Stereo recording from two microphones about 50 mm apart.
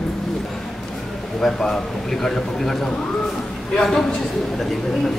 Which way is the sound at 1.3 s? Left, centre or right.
Centre.